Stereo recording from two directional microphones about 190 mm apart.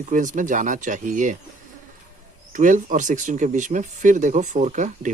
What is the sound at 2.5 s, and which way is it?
Speech, 40° right (ahead or behind).